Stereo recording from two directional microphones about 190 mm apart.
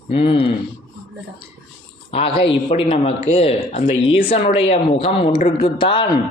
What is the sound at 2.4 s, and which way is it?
Speech, 30° left (ahead or behind).